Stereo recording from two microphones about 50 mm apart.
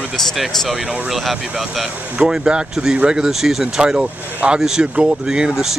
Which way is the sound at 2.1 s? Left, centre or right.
Centre.